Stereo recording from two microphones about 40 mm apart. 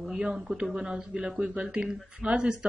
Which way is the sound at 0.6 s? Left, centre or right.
Centre.